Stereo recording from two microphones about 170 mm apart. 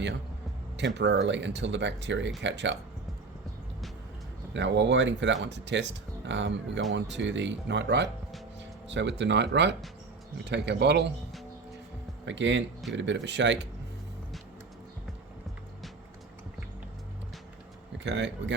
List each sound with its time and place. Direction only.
0.8 s speech: 90° right
4.5 s speech: 90° right
12.2 s speech: 90° right
17.9 s speech: 90° right